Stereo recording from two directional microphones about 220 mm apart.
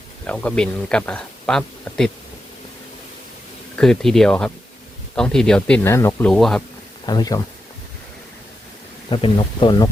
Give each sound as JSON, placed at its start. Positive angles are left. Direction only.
{"t": 0.3, "sound": "speech", "side_deg": 5}
{"t": 3.8, "sound": "speech", "side_deg": 0}
{"t": 7.0, "sound": "speech", "side_deg": 20}
{"t": 9.0, "sound": "speech", "side_deg": 25}